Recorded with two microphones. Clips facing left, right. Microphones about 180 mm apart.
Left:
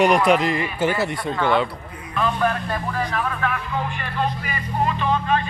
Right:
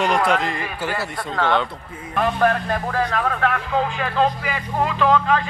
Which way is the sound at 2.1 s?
60° right (ahead or behind).